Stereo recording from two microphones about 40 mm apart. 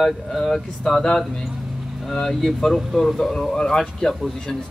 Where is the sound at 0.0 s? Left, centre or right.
Centre.